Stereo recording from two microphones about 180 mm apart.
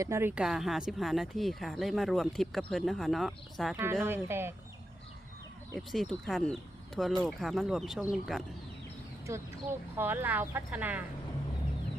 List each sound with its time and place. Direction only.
0.0 s speech: 15° right (ahead or behind)
4.0 s speech: 15° right (ahead or behind)
5.7 s speech: centre (ahead or behind)
9.3 s speech: 15° right (ahead or behind)